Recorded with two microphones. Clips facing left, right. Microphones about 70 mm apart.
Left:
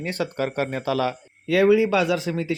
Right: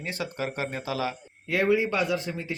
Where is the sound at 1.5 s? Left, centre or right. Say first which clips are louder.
Left 7 dB; left.